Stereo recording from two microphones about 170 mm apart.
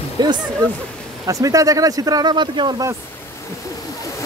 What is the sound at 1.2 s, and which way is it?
Speech, 20° right (ahead or behind).